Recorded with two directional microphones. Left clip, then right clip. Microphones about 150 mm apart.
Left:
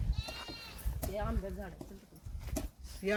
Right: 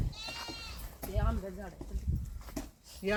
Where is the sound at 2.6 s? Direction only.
90° left.